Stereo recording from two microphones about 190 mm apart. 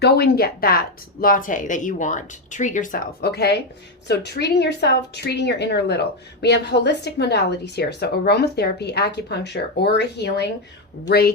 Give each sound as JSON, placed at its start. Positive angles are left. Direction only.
{"t": 0.0, "sound": "speech", "side_deg": 55}